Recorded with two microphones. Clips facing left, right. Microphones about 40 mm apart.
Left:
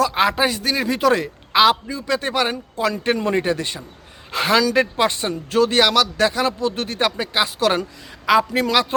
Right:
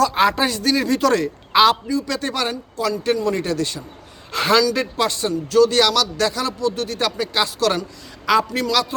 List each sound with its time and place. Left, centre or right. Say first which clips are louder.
0.0 s speech: right 1 dB; centre
1.5 s a man's voice: right 1 dB; centre
1.9 s speech: even; left
2.5 s speech: left 1 dB; left
4.3 s speech: right 1 dB; centre
4.6 s speech: left 2 dB; left
8.7 s speech: left 2 dB; left